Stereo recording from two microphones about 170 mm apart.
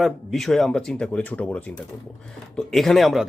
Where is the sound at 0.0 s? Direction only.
Centre (ahead or behind).